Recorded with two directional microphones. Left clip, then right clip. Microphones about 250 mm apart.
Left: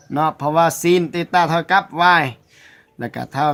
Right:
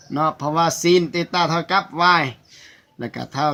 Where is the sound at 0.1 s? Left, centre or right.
Left.